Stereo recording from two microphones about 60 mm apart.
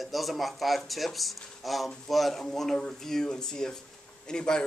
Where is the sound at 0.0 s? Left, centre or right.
Centre.